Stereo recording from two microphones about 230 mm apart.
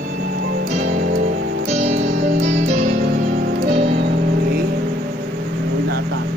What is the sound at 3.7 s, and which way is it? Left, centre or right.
Music, right.